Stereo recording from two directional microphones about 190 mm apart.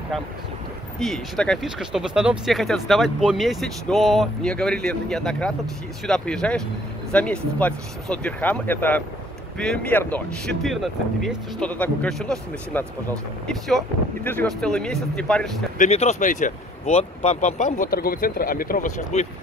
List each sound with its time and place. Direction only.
0.9 s speech: centre (ahead or behind)
15.8 s speech: 35° left (ahead or behind)